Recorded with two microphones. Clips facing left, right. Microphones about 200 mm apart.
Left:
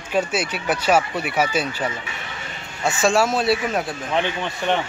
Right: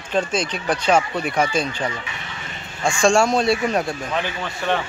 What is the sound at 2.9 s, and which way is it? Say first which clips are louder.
Speech: right 2 dB; 5° left (ahead or behind).